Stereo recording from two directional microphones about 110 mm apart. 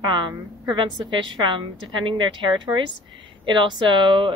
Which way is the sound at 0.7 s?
40° right (ahead or behind).